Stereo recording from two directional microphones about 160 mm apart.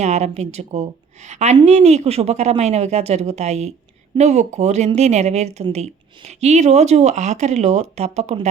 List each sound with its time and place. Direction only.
0.0 s a woman's voice: 45° right (ahead or behind)